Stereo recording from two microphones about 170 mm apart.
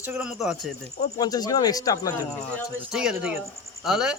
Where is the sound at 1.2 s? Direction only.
25° left (ahead or behind).